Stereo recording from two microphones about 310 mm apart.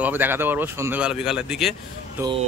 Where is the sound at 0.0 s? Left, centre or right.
Centre.